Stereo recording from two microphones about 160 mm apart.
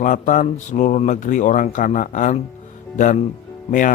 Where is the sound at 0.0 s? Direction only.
55° left (ahead or behind).